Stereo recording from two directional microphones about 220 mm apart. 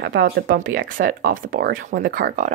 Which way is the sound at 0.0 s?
50° right (ahead or behind).